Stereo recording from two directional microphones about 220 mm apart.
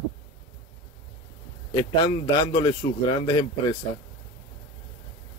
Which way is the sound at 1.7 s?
20° left (ahead or behind).